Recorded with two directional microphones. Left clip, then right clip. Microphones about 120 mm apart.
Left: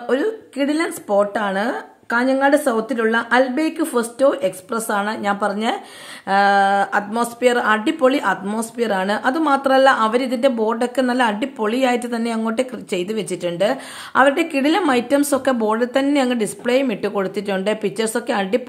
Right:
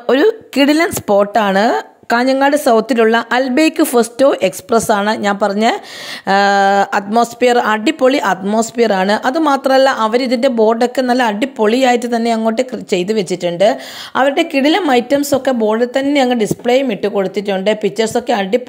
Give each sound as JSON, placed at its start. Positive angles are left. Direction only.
{"t": 0.0, "sound": "speech", "side_deg": -85}
{"t": 7.1, "sound": "speech", "side_deg": -50}